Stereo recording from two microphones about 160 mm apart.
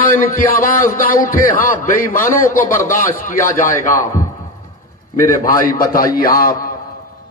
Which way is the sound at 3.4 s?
20° left (ahead or behind).